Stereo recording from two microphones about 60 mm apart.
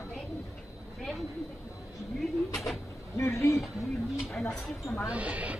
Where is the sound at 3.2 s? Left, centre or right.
Left.